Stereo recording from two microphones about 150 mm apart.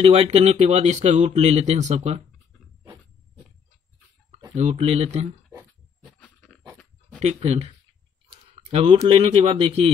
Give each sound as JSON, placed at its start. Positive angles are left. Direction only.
{"t": 0.0, "sound": "speech", "side_deg": -40}
{"t": 4.6, "sound": "speech", "side_deg": -50}
{"t": 6.0, "sound": "dog", "side_deg": 5}
{"t": 7.2, "sound": "speech", "side_deg": -45}